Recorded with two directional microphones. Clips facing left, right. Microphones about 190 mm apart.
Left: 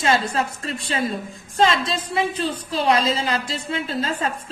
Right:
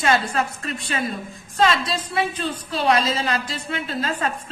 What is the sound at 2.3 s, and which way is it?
A woman's voice, 30° left (ahead or behind).